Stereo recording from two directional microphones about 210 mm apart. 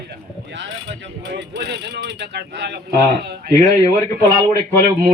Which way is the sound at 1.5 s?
50° right (ahead or behind).